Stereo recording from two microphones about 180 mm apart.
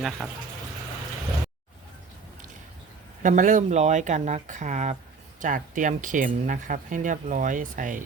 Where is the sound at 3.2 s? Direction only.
45° right (ahead or behind).